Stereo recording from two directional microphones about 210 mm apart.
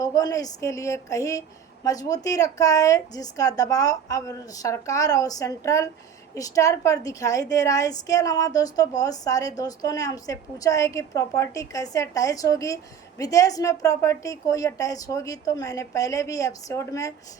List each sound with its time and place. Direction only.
0.0 s a woman's voice: 15° left (ahead or behind)